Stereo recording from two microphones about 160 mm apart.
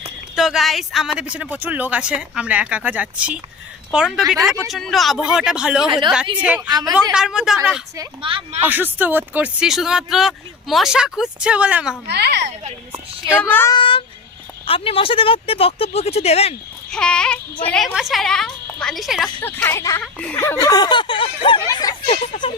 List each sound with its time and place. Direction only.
0.3 s speech: centre (ahead or behind)
6.6 s a woman's voice: 25° right (ahead or behind)
7.1 s speech: 5° right (ahead or behind)
8.2 s speech: 30° right (ahead or behind)
8.6 s speech: 10° right (ahead or behind)
12.0 s a child's voice: 90° right
13.2 s speech: 10° left (ahead or behind)
13.7 s speech: 30° left (ahead or behind)
16.9 s speech: 5° left (ahead or behind)
19.4 s speech: 10° left (ahead or behind)
20.0 s speech: 5° left (ahead or behind)
20.6 s speech: 25° left (ahead or behind)
22.1 s speech: 35° left (ahead or behind)